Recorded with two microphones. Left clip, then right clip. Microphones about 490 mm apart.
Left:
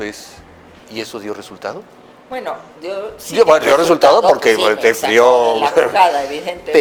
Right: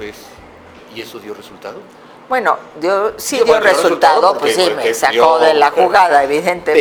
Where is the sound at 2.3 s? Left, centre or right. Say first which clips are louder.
Right 10 dB; right.